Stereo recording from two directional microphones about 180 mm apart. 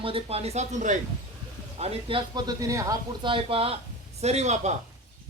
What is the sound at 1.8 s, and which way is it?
Speech, 30° right (ahead or behind).